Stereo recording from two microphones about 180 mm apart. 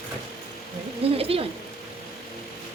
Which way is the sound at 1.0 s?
30° right (ahead or behind).